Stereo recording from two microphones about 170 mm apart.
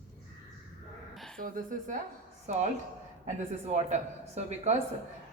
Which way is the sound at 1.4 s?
50° right (ahead or behind).